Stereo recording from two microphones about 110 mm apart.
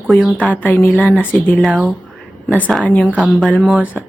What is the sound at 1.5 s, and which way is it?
Speech, 5° right (ahead or behind).